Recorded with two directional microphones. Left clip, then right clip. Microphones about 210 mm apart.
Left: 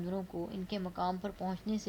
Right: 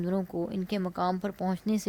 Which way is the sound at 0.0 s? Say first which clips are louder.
Right 7 dB; 45° right (ahead or behind).